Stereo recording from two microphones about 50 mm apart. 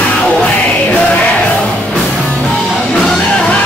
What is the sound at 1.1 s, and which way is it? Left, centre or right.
Music, left.